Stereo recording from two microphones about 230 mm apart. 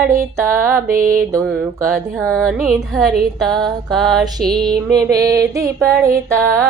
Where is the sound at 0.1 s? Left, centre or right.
Centre.